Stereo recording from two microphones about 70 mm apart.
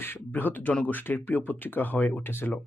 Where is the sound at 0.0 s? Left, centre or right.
Left.